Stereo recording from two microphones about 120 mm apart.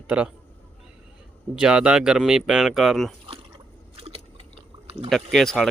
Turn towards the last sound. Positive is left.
turn(degrees=5)  # may be behind; listen again after turning